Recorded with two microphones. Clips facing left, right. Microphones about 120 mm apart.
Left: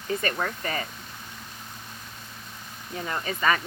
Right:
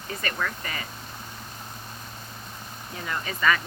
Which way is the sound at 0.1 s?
35° left (ahead or behind).